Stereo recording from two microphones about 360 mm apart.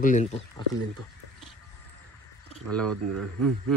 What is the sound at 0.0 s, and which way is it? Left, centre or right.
Speech, centre.